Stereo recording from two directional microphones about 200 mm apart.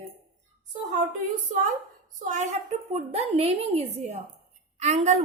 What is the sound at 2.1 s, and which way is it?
A woman's voice, 35° right (ahead or behind).